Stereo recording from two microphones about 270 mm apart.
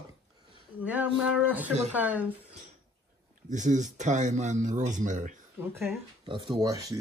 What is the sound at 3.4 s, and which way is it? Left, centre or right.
Speech, right.